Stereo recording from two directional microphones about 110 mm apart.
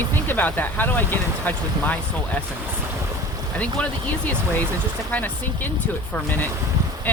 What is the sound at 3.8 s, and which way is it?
Speech, 10° left (ahead or behind).